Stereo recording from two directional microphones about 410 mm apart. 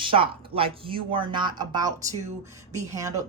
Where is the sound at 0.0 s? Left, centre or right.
Centre.